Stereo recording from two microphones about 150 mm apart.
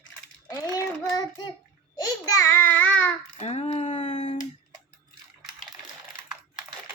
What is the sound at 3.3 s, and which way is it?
A woman's voice, 45° left (ahead or behind).